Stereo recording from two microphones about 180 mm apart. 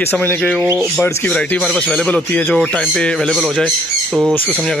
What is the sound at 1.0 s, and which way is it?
Speech, 15° left (ahead or behind).